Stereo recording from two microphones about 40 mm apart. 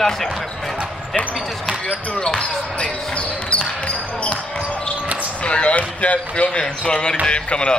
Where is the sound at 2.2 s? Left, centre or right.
Left.